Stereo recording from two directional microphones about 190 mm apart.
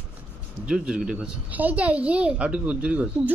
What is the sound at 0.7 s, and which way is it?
A woman's voice, 5° right (ahead or behind).